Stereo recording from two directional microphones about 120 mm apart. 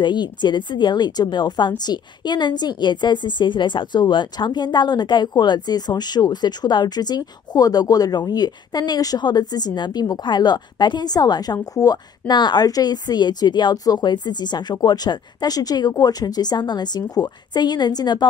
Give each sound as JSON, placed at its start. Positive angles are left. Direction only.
{"t": 0.0, "sound": "a woman's voice", "side_deg": 40}